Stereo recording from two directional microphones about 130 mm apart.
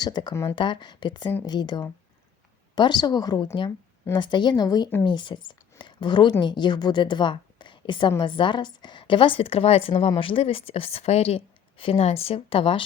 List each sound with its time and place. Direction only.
0.0 s a woman's voice: 35° left (ahead or behind)